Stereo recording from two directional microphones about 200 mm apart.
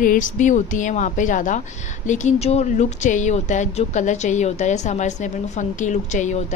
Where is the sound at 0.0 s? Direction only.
40° left (ahead or behind).